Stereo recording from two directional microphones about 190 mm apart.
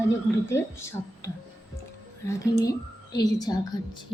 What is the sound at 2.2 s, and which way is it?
A woman's voice, 15° left (ahead or behind).